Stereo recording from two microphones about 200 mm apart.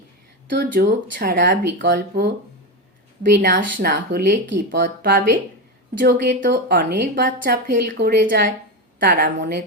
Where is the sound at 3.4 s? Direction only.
45° right (ahead or behind).